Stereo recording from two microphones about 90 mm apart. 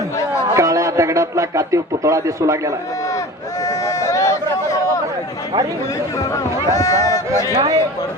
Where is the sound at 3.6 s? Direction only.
40° left (ahead or behind).